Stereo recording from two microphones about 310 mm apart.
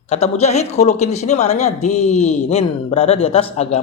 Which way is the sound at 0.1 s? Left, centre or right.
Left.